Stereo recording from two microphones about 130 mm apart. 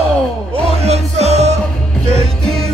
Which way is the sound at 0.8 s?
55° right (ahead or behind).